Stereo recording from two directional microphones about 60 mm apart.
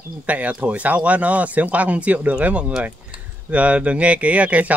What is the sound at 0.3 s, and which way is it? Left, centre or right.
Speech, right.